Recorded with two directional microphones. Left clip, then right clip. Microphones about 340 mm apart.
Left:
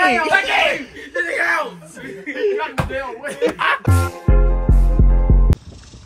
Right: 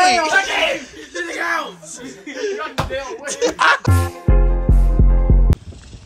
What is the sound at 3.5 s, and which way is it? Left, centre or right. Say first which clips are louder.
Speech: right 4 dB; centre.